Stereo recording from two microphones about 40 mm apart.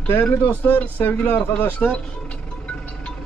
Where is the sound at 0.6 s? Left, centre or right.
Left.